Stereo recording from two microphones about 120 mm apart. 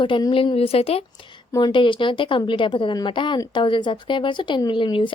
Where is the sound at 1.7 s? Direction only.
45° left (ahead or behind).